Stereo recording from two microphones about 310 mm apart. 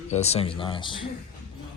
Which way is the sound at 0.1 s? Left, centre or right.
Left.